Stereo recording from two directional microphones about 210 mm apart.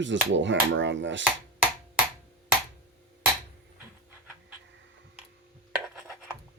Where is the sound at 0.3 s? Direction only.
60° right (ahead or behind).